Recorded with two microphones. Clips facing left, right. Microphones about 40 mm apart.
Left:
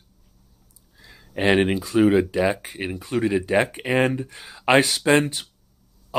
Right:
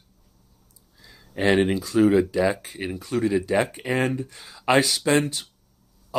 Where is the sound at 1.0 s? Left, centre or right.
Centre.